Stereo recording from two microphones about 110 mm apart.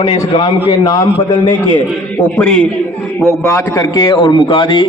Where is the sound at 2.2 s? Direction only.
10° left (ahead or behind).